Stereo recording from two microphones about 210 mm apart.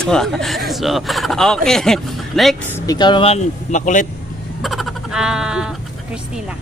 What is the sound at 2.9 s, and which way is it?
Speech, 20° left (ahead or behind).